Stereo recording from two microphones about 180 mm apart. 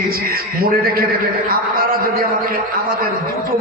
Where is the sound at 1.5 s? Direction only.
55° right (ahead or behind).